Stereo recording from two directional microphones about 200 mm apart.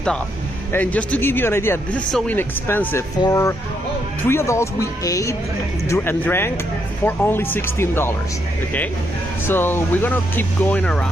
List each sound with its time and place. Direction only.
0.7 s speech: 5° left (ahead or behind)
9.5 s speech: 10° left (ahead or behind)